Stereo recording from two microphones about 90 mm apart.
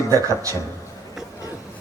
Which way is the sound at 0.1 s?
35° right (ahead or behind).